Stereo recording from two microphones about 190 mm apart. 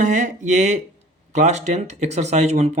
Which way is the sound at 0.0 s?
40° right (ahead or behind).